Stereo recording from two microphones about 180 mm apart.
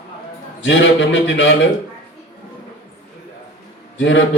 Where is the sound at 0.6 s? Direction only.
90° left.